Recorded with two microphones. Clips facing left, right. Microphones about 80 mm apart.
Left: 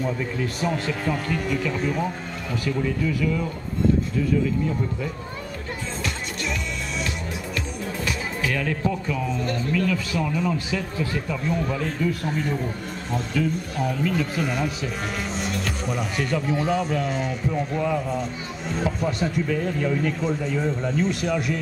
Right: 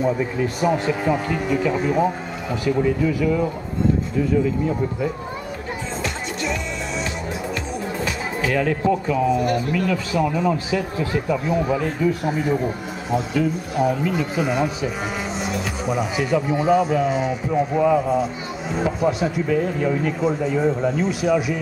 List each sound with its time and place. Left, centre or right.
0.0 s speech: centre
8.5 s speech: centre